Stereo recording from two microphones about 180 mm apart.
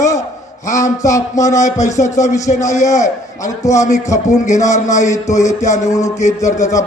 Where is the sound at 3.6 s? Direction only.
20° left (ahead or behind).